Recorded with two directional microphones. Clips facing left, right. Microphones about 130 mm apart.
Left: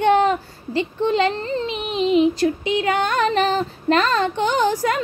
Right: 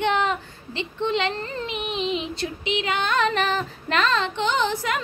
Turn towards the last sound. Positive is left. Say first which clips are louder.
# left 5 dB
turn(degrees=40)  # may be behind; listen again after turning